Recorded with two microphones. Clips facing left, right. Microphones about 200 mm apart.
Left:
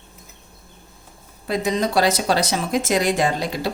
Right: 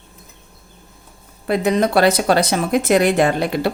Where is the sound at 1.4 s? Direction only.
60° right (ahead or behind).